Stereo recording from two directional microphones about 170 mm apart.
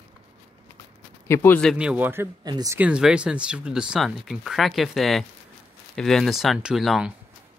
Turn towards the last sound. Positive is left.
turn(degrees=0)  # may be behind; listen again after turning